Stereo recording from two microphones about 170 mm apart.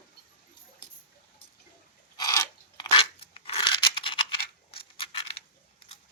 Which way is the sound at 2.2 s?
20° left (ahead or behind).